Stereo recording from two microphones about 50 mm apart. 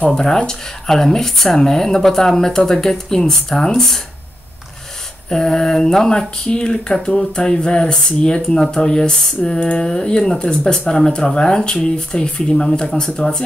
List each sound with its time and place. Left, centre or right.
0.1 s speech: centre
5.3 s speech: centre